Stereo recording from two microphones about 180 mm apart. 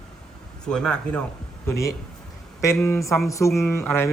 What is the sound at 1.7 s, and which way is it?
Speech, 15° left (ahead or behind).